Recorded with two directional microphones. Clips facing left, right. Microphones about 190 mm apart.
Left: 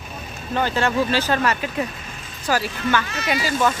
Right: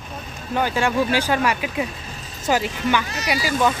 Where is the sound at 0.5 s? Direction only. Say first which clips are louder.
Even; 10° right (ahead or behind).